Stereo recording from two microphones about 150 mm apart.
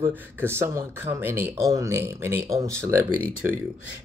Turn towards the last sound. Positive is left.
turn(degrees=-15)  # may be behind; listen again after turning